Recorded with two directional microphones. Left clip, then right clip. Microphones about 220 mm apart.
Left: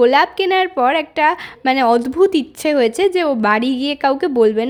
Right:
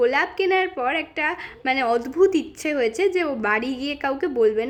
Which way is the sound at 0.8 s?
40° left (ahead or behind).